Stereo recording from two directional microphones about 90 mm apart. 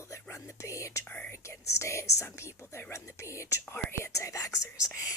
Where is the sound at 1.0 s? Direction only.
20° left (ahead or behind).